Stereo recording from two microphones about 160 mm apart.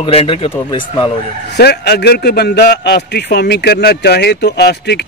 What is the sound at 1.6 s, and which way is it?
A man's voice, 85° left.